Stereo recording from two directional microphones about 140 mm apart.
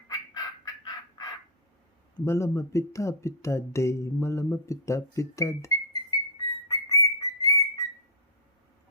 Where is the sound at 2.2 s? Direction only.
20° left (ahead or behind).